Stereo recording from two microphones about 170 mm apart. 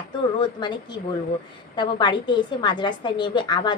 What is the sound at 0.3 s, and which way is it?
A woman's voice, 25° left (ahead or behind).